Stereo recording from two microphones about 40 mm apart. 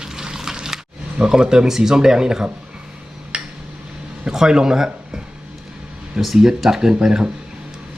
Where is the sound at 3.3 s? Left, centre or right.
Right.